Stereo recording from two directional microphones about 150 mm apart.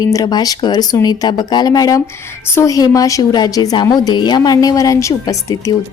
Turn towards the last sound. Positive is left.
turn(degrees=25)  # may be behind; listen again after turning